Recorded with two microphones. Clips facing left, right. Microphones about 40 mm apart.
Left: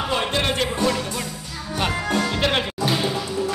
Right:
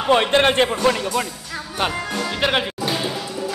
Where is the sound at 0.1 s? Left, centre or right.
Right.